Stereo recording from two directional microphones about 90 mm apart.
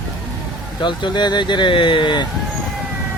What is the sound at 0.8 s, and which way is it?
Speech, 60° left (ahead or behind).